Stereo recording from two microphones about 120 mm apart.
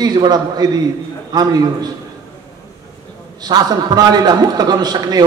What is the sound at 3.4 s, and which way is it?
A man's voice, 35° right (ahead or behind).